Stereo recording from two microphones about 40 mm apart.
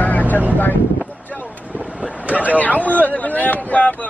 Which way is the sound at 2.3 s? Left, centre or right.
Left.